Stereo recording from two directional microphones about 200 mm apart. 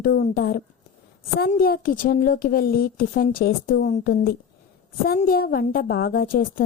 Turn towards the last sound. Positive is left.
turn(degrees=45)  # may be behind; listen again after turning